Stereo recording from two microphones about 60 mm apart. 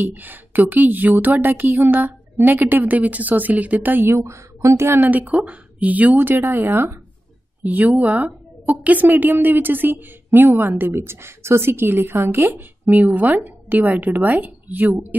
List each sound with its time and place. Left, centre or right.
0.0 s a woman's voice: right
4.1 s a woman's voice: right
4.8 s a woman's voice: right
5.1 s a woman's voice: right
7.6 s a woman's voice: right